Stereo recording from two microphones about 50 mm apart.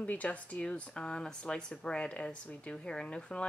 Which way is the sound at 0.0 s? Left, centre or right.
Left.